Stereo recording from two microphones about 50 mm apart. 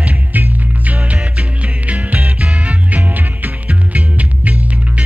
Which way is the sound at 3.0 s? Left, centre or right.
Right.